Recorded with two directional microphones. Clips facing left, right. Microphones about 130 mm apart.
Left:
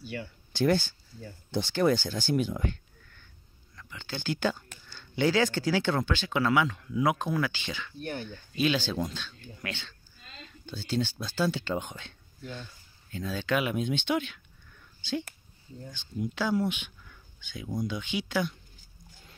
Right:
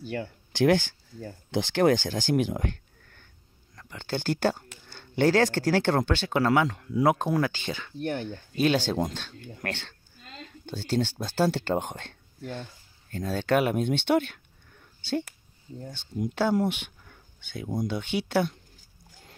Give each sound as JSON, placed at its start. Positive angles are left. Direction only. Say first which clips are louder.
{"t": 0.0, "sound": "speech", "louder": "right 5 dB", "side_deg": -50}
{"t": 0.5, "sound": "speech", "louder": "right 3 dB", "side_deg": -90}
{"t": 8.0, "sound": "speech", "louder": "right 6 dB", "side_deg": -75}
{"t": 8.3, "sound": "speech", "louder": "right 3 dB", "side_deg": -50}
{"t": 15.8, "sound": "speech", "louder": "right 3 dB", "side_deg": -60}